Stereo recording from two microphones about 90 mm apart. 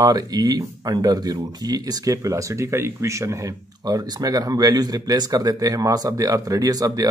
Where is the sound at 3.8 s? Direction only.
45° right (ahead or behind).